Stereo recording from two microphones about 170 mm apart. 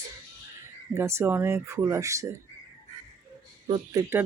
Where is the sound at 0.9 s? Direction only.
15° right (ahead or behind).